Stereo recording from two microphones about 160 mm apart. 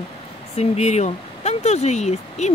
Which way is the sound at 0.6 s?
45° left (ahead or behind).